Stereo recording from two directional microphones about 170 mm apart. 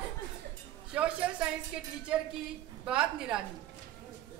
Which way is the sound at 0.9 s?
5° right (ahead or behind).